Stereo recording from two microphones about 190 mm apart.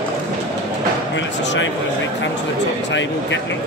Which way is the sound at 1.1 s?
75° left (ahead or behind).